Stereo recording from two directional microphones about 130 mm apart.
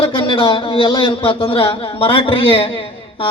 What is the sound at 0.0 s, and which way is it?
A man's voice, 40° left (ahead or behind).